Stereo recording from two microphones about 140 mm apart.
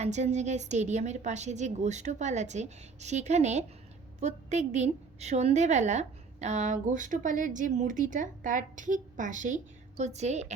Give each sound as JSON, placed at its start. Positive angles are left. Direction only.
{"t": 0.0, "sound": "a woman's voice", "side_deg": -55}
{"t": 10.0, "sound": "a woman's voice", "side_deg": -55}